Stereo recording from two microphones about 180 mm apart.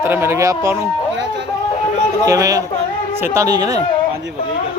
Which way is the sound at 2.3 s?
20° right (ahead or behind).